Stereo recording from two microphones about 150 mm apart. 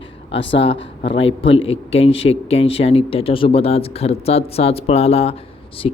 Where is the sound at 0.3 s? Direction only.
35° left (ahead or behind).